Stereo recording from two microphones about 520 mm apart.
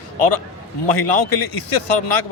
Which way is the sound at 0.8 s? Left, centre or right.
Left.